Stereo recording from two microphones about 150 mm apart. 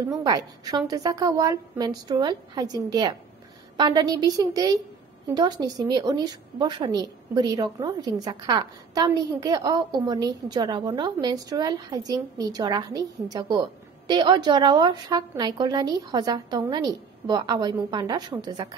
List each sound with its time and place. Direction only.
0.1 s a woman's voice: 25° right (ahead or behind)